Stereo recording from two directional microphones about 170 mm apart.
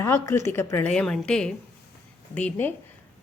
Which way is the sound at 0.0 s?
15° left (ahead or behind).